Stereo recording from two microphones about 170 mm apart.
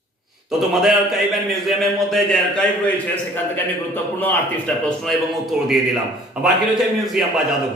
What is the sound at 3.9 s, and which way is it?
Speech, 10° left (ahead or behind).